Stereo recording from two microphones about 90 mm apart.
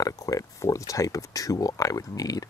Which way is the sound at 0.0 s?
40° left (ahead or behind).